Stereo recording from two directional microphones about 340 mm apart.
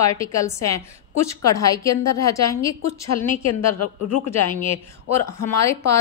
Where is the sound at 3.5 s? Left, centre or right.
Left.